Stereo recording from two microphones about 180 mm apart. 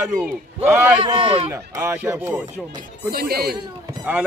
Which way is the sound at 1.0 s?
30° right (ahead or behind).